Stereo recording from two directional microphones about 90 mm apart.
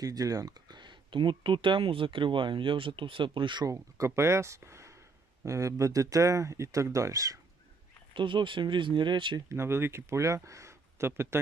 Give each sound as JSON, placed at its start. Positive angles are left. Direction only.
{"t": 0.0, "sound": "speech", "side_deg": -40}
{"t": 3.7, "sound": "speech", "side_deg": -35}
{"t": 8.1, "sound": "speech", "side_deg": -65}
{"t": 9.5, "sound": "speech", "side_deg": -30}